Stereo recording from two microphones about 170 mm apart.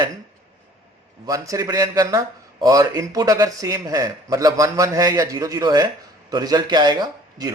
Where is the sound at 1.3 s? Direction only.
20° right (ahead or behind).